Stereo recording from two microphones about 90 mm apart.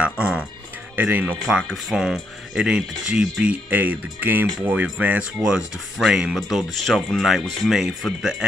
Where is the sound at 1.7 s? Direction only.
5° right (ahead or behind).